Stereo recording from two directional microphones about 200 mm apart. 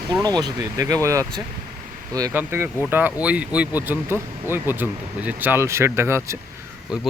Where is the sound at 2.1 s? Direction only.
15° right (ahead or behind).